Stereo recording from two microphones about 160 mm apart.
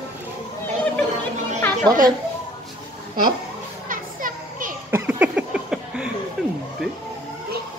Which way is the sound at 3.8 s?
55° right (ahead or behind).